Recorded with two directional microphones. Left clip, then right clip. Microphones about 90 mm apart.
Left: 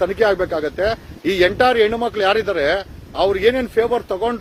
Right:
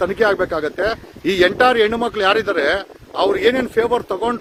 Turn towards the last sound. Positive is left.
turn(degrees=-45)  # may be behind; listen again after turning